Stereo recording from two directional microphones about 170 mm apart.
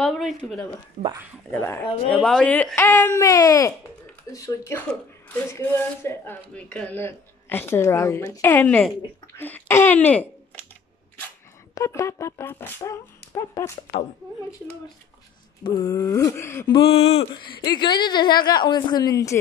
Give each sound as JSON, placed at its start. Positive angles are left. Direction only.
{"t": 0.0, "sound": "speech", "side_deg": 0}
{"t": 1.0, "sound": "speech", "side_deg": -45}
{"t": 1.5, "sound": "a woman's voice", "side_deg": 10}
{"t": 11.7, "sound": "a woman's voice", "side_deg": 20}
{"t": 15.6, "sound": "a woman's voice", "side_deg": 25}
{"t": 16.7, "sound": "a woman's voice", "side_deg": 35}